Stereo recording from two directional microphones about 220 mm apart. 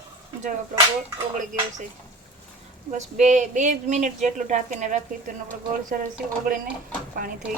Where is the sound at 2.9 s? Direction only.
30° right (ahead or behind).